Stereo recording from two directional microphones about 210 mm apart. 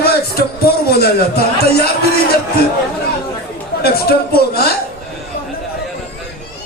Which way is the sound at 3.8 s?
45° left (ahead or behind).